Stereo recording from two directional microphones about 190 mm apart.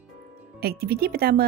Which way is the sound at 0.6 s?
55° right (ahead or behind).